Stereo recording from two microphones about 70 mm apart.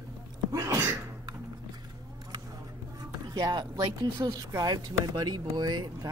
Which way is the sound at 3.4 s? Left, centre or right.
Right.